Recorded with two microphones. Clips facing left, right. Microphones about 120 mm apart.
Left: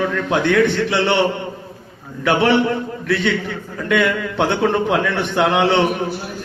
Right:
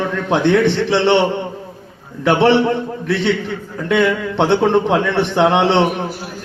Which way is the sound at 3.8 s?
30° right (ahead or behind).